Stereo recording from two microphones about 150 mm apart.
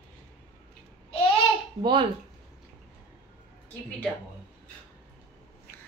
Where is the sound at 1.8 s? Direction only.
30° right (ahead or behind).